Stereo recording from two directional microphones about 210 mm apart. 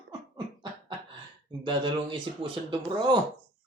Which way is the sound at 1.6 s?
25° right (ahead or behind).